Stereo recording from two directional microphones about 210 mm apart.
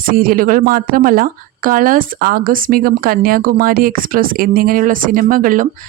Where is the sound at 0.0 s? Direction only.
40° right (ahead or behind).